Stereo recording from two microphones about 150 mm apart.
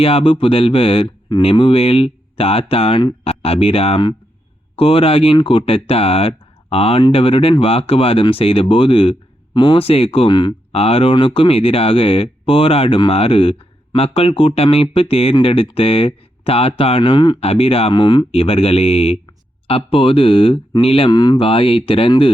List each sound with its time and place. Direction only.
0.0 s speech: 40° left (ahead or behind)